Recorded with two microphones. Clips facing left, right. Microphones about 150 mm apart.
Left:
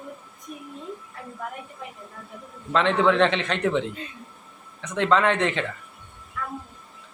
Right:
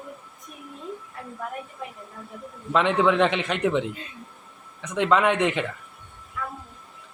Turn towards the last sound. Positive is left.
turn(degrees=-5)  # may be behind; listen again after turning